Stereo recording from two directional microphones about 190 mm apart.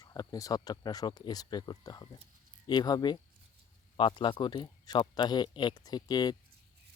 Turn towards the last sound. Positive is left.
turn(degrees=20)  # may be behind; listen again after turning